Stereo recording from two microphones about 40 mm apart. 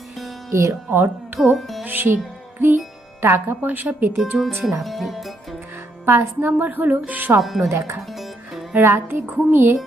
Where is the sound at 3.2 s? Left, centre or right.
Right.